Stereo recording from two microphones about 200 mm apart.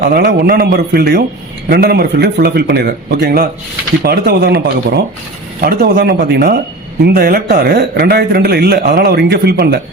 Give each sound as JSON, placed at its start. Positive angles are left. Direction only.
{"t": 0.0, "sound": "a man's voice", "side_deg": -55}